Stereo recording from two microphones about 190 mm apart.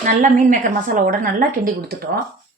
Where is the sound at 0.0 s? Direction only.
45° right (ahead or behind).